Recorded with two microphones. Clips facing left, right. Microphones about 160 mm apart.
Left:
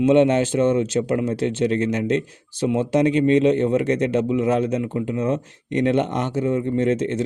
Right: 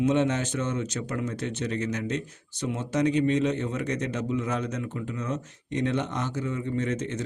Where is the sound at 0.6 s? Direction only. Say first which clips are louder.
Left 11 dB; 60° left (ahead or behind).